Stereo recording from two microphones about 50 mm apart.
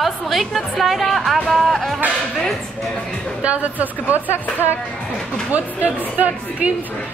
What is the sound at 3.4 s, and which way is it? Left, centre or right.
A woman's voice, right.